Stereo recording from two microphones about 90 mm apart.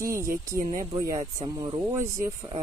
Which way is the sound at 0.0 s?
35° right (ahead or behind).